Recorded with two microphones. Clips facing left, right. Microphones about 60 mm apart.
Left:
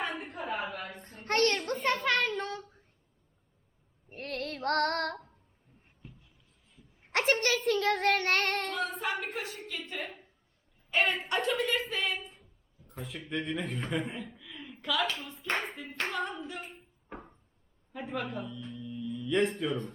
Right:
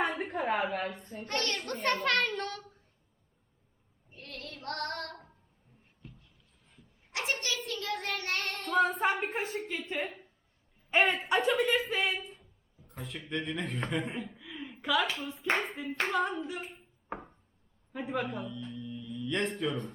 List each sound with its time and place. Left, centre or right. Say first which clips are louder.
0.2 s a sound: right 5 dB; right
0.9 s a child's voice: left 6 dB; left
1.8 s a child's voice: right 1 dB; centre
4.1 s female singing: left 8 dB; left
6.0 s a sound: even; centre
7.1 s speech: left 7 dB; left
8.7 s a sound: right 6 dB; right
9.2 s a woman's voice: right 4 dB; right
9.9 s a child's voice: right 5 dB; centre
10.9 s a woman's voice: right 2 dB; centre
13.0 s a man's voice: left 1 dB; centre
15.4 s a child's voice: right 4 dB; centre